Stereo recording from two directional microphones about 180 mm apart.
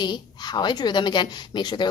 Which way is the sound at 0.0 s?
25° left (ahead or behind).